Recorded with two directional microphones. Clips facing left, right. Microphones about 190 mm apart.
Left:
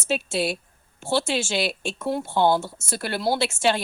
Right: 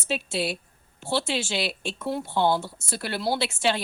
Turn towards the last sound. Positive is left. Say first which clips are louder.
# left 3 dB
turn(degrees=45)  # may be behind; listen again after turning